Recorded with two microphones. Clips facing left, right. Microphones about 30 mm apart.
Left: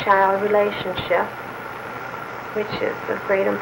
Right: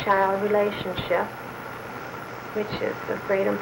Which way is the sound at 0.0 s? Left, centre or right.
Centre.